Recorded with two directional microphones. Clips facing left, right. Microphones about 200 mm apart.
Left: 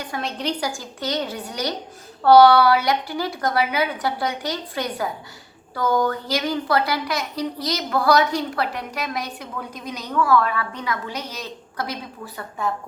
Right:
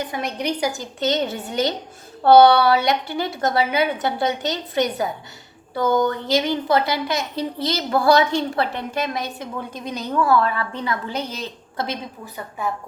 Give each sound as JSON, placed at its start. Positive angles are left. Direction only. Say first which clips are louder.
{"t": 0.0, "sound": "a woman's voice", "louder": "right 2 dB", "side_deg": -15}